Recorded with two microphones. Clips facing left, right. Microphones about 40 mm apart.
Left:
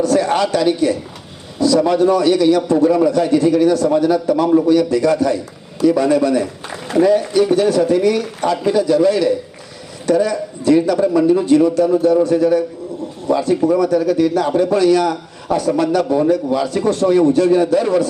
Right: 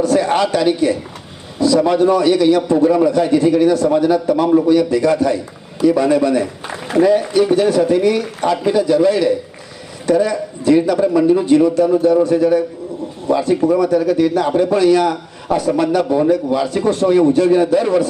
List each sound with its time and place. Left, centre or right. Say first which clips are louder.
0.0 s a man's voice: right 1 dB; right